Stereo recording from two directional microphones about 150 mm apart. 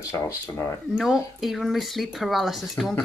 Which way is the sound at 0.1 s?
20° left (ahead or behind).